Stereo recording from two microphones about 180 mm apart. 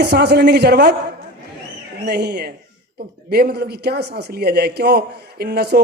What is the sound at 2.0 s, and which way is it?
A man's voice, 65° right (ahead or behind).